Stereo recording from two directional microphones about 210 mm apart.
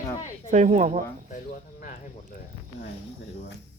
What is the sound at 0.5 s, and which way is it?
Speech, 35° right (ahead or behind).